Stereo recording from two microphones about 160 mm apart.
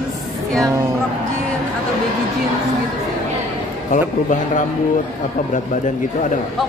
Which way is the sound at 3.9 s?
55° left (ahead or behind).